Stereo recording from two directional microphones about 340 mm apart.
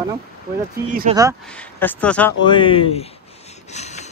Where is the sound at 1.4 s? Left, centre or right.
Centre.